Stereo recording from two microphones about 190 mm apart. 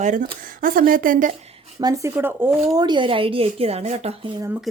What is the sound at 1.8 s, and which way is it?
Speech, 15° right (ahead or behind).